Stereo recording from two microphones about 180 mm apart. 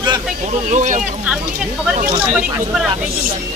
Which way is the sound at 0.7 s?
40° right (ahead or behind).